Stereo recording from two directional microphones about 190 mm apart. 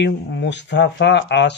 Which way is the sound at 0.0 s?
65° left (ahead or behind).